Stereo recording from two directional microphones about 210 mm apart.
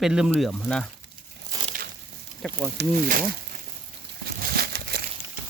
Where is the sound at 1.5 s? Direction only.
15° right (ahead or behind).